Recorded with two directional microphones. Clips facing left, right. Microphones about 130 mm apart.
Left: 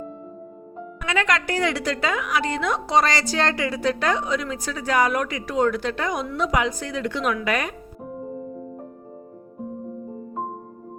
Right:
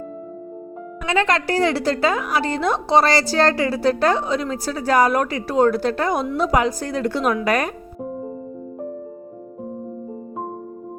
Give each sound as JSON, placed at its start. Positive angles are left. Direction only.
{"t": 1.0, "sound": "a woman's voice", "side_deg": -30}